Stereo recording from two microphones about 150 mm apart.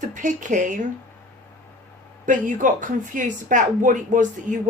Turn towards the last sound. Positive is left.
turn(degrees=-60)  # may be behind; listen again after turning